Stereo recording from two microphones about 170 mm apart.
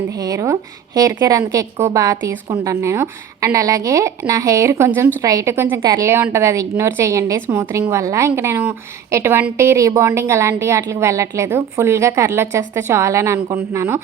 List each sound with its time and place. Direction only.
0.2 s a woman's voice: 20° right (ahead or behind)